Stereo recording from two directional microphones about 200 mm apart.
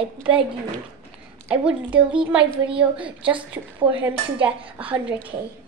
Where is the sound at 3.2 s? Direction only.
25° right (ahead or behind).